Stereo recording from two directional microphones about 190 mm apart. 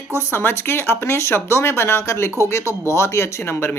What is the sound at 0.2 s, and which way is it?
Speech, 10° left (ahead or behind).